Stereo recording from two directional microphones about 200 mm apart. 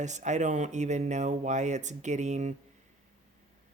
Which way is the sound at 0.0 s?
35° right (ahead or behind).